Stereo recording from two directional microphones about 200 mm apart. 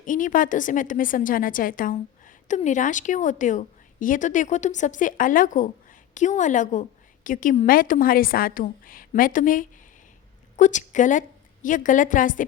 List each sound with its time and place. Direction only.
0.0 s a woman's voice: 40° left (ahead or behind)